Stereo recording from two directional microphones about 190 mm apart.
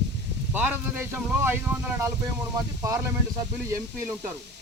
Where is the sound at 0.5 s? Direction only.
10° right (ahead or behind).